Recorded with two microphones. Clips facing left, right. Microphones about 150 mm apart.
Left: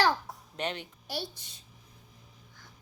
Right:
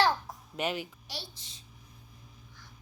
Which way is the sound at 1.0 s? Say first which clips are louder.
Left 7 dB; 55° left (ahead or behind).